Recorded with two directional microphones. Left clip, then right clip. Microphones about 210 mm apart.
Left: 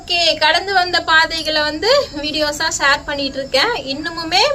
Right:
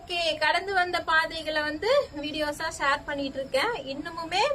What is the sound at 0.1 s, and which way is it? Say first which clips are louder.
A woman's voice: left 11 dB; 10° right (ahead or behind).